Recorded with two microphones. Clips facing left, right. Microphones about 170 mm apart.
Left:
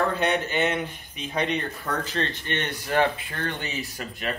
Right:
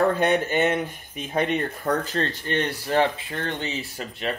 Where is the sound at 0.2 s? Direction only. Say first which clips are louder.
Right 3 dB; 45° right (ahead or behind).